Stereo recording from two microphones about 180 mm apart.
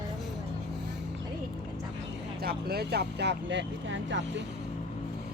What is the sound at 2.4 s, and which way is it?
Speech, 60° right (ahead or behind).